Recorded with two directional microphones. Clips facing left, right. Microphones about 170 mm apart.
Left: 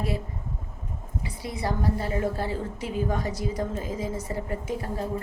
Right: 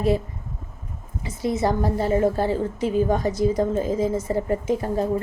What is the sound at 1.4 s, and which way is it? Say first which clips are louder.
A woman's voice: right 8 dB; 25° right (ahead or behind).